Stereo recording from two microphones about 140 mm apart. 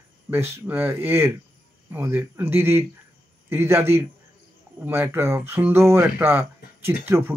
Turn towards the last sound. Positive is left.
turn(degrees=-15)  # may be behind; listen again after turning